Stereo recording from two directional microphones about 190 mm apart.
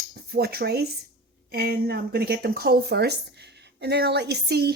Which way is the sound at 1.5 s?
55° right (ahead or behind).